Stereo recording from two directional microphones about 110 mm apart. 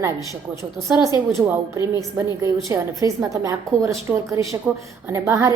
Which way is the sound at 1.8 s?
30° right (ahead or behind).